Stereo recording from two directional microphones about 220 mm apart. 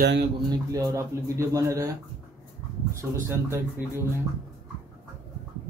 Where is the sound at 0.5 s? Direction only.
15° right (ahead or behind).